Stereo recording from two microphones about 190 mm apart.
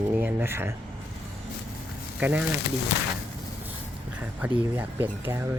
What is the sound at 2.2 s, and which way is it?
Speech, 10° right (ahead or behind).